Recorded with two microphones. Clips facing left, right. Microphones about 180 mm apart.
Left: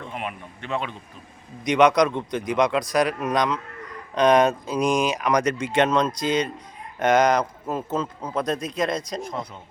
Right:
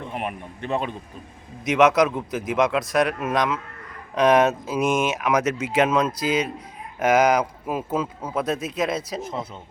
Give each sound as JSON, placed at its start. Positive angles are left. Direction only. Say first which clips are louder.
{"t": 0.2, "sound": "speech", "louder": "right 3 dB", "side_deg": -40}
{"t": 1.6, "sound": "speech", "louder": "even", "side_deg": -5}